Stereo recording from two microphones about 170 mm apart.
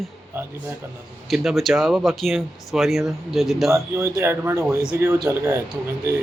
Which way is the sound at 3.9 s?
15° right (ahead or behind).